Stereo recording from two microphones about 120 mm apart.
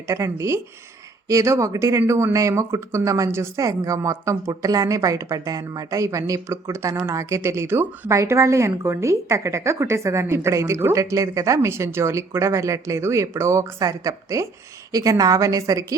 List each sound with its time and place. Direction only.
0.1 s speech: 25° right (ahead or behind)